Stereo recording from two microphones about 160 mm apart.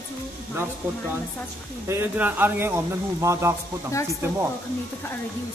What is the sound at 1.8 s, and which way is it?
Speech, 15° right (ahead or behind).